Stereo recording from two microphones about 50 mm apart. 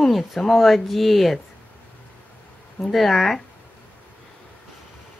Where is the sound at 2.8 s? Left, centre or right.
Centre.